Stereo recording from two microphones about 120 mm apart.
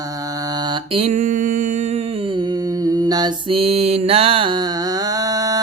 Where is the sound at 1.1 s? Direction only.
90° right.